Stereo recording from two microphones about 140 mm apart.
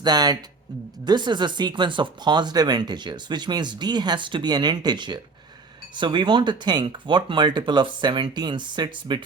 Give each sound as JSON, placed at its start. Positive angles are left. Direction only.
{"t": 0.0, "sound": "speech", "side_deg": -30}